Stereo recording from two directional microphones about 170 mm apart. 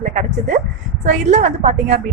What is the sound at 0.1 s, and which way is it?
A woman's voice, 45° right (ahead or behind).